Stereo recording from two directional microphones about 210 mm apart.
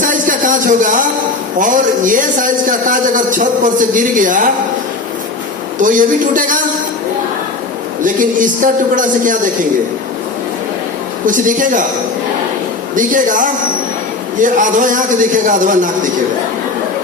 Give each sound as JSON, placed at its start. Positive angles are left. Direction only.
{"t": 0.0, "sound": "a sound", "side_deg": -40}
{"t": 1.5, "sound": "a man's voice", "side_deg": -40}
{"t": 5.8, "sound": "a man's voice", "side_deg": -40}
{"t": 8.0, "sound": "a man's voice", "side_deg": -40}
{"t": 11.3, "sound": "a man's voice", "side_deg": -40}
{"t": 13.0, "sound": "a man's voice", "side_deg": -40}